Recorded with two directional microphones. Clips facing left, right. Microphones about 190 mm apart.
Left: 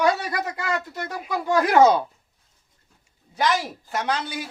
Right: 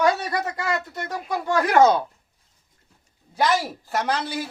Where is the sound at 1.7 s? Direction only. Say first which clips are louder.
Even; 10° left (ahead or behind).